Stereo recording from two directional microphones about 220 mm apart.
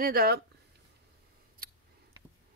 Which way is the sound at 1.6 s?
40° right (ahead or behind).